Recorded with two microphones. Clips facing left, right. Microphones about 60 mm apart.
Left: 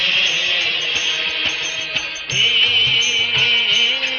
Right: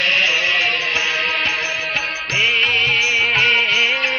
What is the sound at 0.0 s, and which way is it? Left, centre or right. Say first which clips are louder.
Music: right 3 dB; right.